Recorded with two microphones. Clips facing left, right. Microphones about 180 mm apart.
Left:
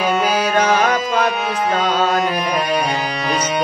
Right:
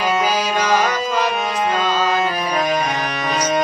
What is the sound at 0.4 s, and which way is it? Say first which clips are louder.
Music: left 2 dB; 60° left (ahead or behind).